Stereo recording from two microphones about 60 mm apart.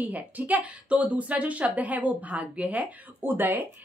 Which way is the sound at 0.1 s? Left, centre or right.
Right.